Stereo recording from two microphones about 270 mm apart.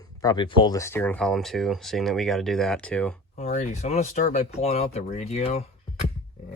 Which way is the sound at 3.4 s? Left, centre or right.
Left.